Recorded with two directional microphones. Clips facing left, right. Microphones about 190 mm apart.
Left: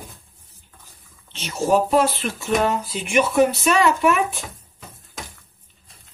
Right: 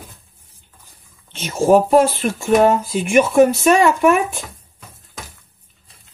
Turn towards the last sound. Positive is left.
turn(degrees=-50)  # may be behind; listen again after turning